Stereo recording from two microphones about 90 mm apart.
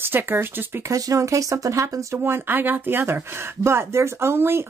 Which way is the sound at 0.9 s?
40° right (ahead or behind).